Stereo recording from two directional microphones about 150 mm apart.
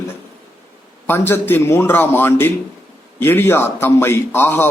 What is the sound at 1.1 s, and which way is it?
A man's voice, 15° left (ahead or behind).